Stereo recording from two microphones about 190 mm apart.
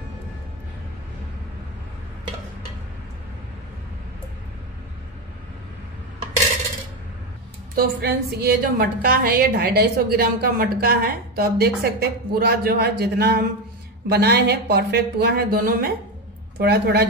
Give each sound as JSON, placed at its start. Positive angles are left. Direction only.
{"t": 7.7, "sound": "a woman's voice", "side_deg": -55}